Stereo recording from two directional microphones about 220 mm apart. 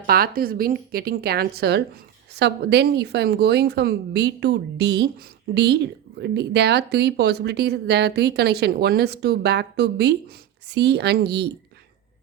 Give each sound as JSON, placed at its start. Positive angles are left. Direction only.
{"t": 0.0, "sound": "speech", "side_deg": -40}